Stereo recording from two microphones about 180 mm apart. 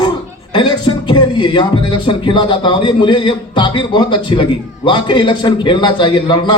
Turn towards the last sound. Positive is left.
turn(degrees=25)  # may be behind; listen again after turning